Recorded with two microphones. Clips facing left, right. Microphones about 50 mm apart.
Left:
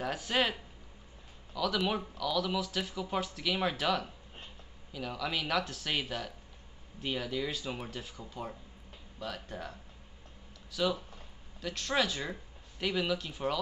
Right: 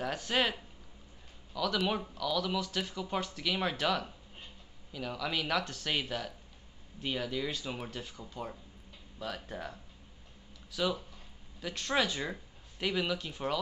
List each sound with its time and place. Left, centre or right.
0.0 s speech: centre